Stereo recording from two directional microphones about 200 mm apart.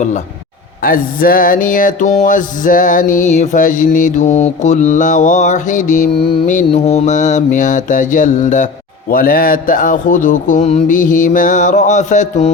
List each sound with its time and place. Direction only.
0.8 s mantra: 45° left (ahead or behind)